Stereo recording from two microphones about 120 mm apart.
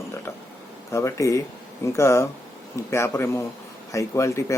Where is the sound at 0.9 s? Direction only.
25° left (ahead or behind).